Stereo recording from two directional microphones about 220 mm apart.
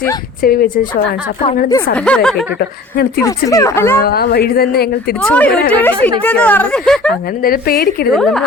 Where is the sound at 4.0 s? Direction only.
45° left (ahead or behind).